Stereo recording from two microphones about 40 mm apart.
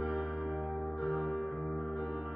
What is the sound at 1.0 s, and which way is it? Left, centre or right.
Music, centre.